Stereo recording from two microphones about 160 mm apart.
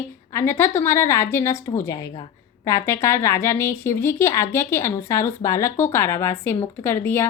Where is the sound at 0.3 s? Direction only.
15° left (ahead or behind).